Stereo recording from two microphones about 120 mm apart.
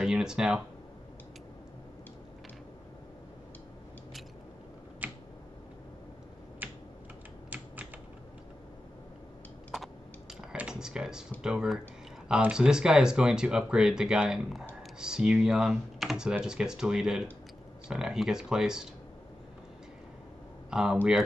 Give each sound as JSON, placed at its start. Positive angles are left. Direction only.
{"t": 0.0, "sound": "speech", "side_deg": -5}
{"t": 5.0, "sound": "a sound", "side_deg": -15}
{"t": 6.6, "sound": "typing", "side_deg": -15}
{"t": 10.5, "sound": "a sound", "side_deg": -5}
{"t": 12.3, "sound": "speech", "side_deg": -5}
{"t": 20.7, "sound": "speech", "side_deg": -5}